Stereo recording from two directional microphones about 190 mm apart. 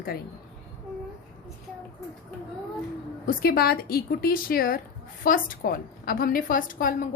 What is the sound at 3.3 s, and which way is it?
A woman's voice, 50° left (ahead or behind).